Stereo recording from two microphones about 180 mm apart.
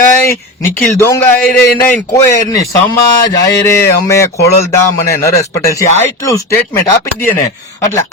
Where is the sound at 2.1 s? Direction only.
20° left (ahead or behind).